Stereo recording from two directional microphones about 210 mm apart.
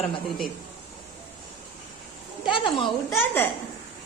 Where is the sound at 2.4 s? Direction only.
25° left (ahead or behind).